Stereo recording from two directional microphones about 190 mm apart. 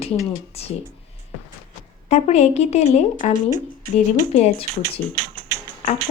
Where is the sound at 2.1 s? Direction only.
35° left (ahead or behind).